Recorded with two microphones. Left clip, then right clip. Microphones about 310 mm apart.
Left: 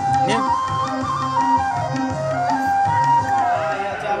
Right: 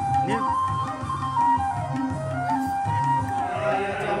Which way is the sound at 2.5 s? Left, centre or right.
Right.